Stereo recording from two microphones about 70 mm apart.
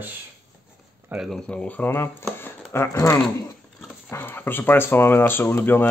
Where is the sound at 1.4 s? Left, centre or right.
Left.